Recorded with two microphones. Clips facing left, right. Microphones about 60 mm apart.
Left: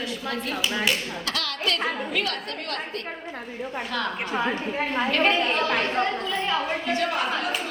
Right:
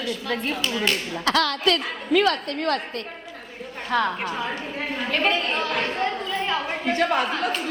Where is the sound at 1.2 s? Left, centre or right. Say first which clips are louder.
Right 10 dB; right.